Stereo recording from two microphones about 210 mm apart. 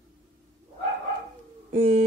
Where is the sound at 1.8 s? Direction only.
30° right (ahead or behind).